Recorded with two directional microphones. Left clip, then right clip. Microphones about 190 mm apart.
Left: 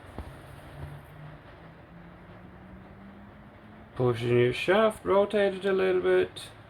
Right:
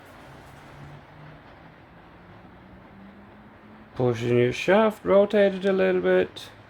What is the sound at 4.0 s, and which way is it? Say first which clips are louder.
Speech: right 2 dB; 25° right (ahead or behind).